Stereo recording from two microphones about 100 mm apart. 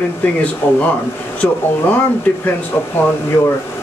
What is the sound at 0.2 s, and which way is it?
Speech, 15° left (ahead or behind).